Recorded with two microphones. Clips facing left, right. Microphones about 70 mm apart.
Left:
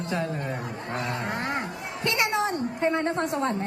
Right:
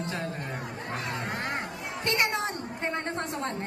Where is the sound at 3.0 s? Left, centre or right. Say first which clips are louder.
Left 6 dB; left.